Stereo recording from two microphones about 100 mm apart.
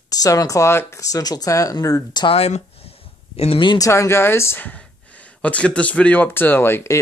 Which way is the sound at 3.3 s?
90° left.